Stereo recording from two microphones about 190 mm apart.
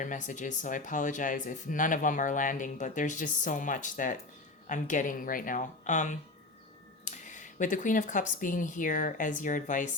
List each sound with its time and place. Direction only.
0.0 s speech: 40° left (ahead or behind)